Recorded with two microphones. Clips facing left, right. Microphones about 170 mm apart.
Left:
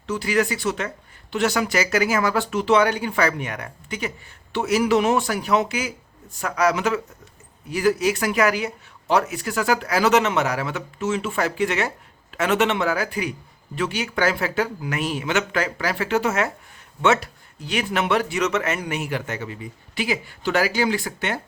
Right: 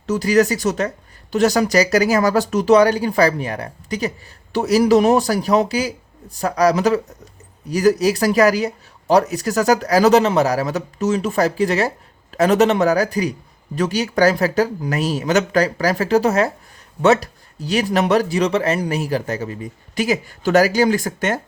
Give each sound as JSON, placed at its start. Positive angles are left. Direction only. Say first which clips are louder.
{"t": 0.1, "sound": "speech", "louder": "right 6 dB", "side_deg": -40}